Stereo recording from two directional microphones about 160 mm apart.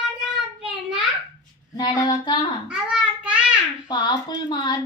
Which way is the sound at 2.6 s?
5° right (ahead or behind).